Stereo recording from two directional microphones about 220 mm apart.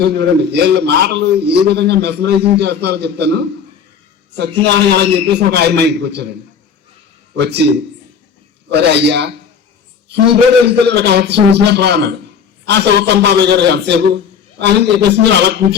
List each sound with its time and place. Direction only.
0.0 s a man's voice: 50° right (ahead or behind)
7.3 s a man's voice: 50° right (ahead or behind)
8.7 s a man's voice: 50° right (ahead or behind)
10.7 s a man's voice: 50° right (ahead or behind)